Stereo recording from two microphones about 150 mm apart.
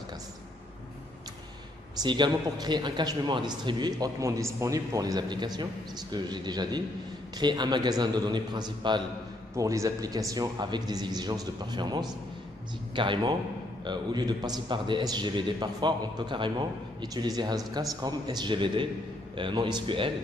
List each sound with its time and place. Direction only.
2.0 s a man's voice: 30° right (ahead or behind)